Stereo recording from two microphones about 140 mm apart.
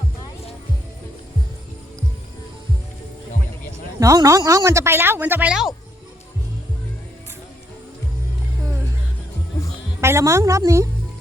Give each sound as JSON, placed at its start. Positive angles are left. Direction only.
{"t": 4.0, "sound": "speech", "side_deg": -25}
{"t": 10.0, "sound": "speech", "side_deg": -20}